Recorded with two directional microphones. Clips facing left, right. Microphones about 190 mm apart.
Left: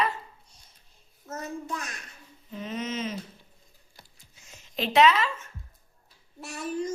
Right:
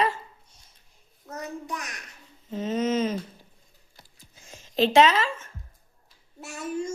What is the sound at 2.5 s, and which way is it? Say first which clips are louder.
Humming: right 8 dB; 40° right (ahead or behind).